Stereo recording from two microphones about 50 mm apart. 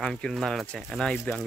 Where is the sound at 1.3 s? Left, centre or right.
Left.